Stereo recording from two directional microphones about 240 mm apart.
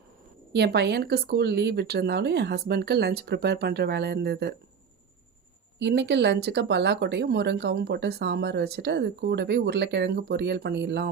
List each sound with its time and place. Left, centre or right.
0.5 s speech: right
5.8 s speech: right